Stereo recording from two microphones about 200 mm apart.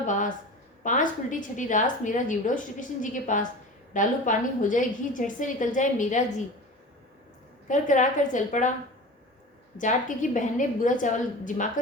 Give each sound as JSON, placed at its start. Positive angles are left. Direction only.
{"t": 0.0, "sound": "a sound", "side_deg": 40}
{"t": 0.9, "sound": "a woman's voice", "side_deg": 40}
{"t": 7.7, "sound": "a woman's voice", "side_deg": 40}
{"t": 9.7, "sound": "a woman's voice", "side_deg": 40}